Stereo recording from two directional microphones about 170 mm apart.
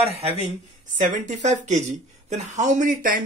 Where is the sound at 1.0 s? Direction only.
45° right (ahead or behind).